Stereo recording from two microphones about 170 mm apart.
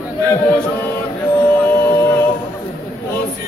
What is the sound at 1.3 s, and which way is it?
Music, 10° left (ahead or behind).